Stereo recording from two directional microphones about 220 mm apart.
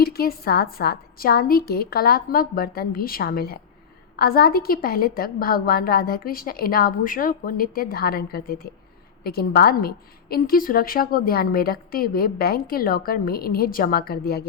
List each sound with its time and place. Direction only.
0.0 s a woman's voice: 45° left (ahead or behind)